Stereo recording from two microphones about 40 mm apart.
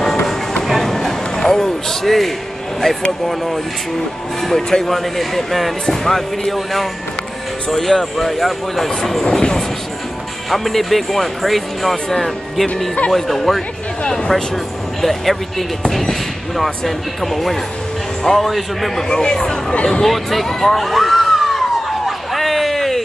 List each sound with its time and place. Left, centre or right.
0.7 s a sound: centre
4.4 s speech: centre
10.5 s speech: centre
14.0 s speech: left
14.3 s speech: centre
19.0 s speech: centre
20.1 s a sound: centre